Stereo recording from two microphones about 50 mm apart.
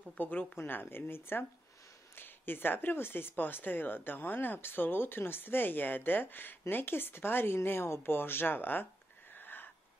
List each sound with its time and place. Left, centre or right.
0.2 s speech: left
7.8 s speech: left
8.1 s speech: left
9.3 s a sound: left